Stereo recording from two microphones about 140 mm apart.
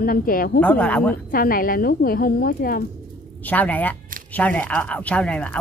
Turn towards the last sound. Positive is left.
turn(degrees=10)  # may be behind; listen again after turning